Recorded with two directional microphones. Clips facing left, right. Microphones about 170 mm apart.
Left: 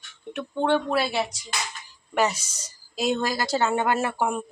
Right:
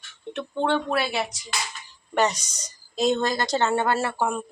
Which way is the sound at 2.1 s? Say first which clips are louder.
Right 1 dB; 5° left (ahead or behind).